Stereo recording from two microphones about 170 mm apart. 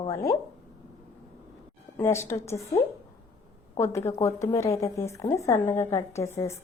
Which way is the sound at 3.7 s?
15° left (ahead or behind).